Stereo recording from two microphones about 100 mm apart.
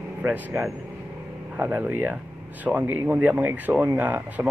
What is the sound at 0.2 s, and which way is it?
Speech, 20° right (ahead or behind).